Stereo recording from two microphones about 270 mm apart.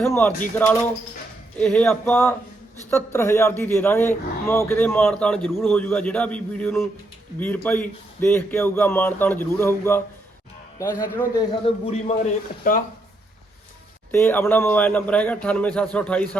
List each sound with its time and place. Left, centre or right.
0.0 s a man's voice: centre; by 12.8 s left
14.1 s a man's voice: centre